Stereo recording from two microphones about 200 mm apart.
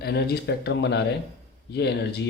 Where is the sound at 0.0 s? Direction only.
55° left (ahead or behind).